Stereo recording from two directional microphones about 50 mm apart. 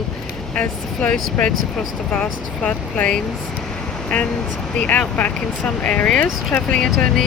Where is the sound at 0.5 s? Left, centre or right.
Left.